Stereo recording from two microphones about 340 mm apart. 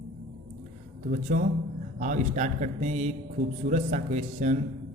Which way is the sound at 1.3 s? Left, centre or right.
Right.